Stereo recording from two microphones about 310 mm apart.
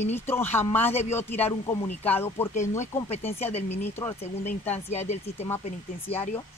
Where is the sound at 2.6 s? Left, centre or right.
Left.